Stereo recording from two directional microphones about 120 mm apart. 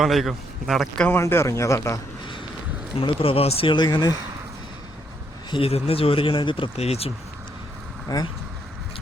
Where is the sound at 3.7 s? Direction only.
35° left (ahead or behind).